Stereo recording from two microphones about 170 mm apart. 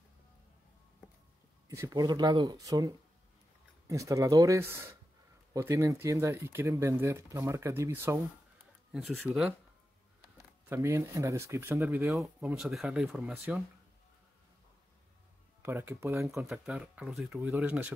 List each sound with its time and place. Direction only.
1.7 s speech: 20° right (ahead or behind)
8.9 s speech: centre (ahead or behind)
10.3 s speech: 15° right (ahead or behind)
12.1 s speech: 5° right (ahead or behind)
15.6 s speech: 15° right (ahead or behind)
16.4 s speech: 5° right (ahead or behind)